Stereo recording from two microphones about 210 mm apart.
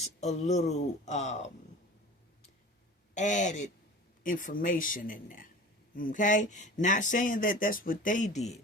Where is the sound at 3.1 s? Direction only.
35° left (ahead or behind).